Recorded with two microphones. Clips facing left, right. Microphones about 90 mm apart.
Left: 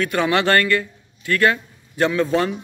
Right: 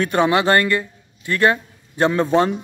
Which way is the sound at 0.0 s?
25° right (ahead or behind).